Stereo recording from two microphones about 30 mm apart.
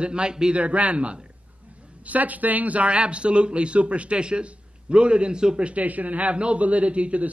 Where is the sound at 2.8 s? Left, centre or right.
Right.